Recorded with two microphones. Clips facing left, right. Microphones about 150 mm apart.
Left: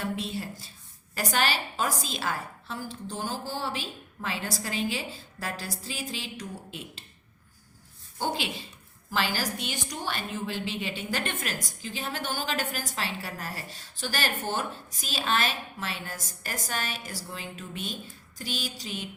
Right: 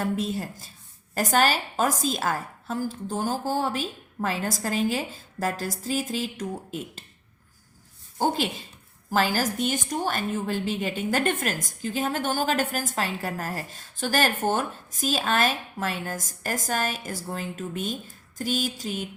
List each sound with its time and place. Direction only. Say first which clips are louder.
0.0 s a woman's voice: right 5 dB; 45° right (ahead or behind)
8.2 s a woman's voice: right 6 dB; 45° right (ahead or behind)